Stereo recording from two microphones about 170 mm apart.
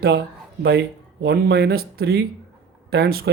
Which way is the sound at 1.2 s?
70° right (ahead or behind).